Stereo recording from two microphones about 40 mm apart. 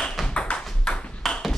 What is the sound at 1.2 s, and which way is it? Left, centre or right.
Ping, centre.